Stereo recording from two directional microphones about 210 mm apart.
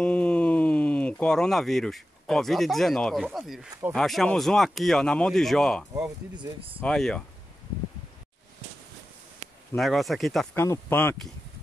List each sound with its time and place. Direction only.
0.0 s speech: 5° left (ahead or behind)
5.9 s speech: 20° right (ahead or behind)
6.8 s speech: 5° left (ahead or behind)
9.8 s speech: centre (ahead or behind)